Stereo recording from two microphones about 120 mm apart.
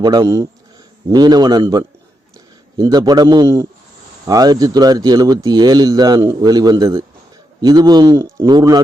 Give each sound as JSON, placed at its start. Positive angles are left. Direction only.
{"t": 0.0, "sound": "a man's voice", "side_deg": -30}